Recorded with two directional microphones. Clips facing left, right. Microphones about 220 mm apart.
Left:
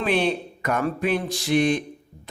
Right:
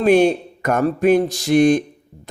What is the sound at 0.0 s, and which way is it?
Speech, 45° right (ahead or behind).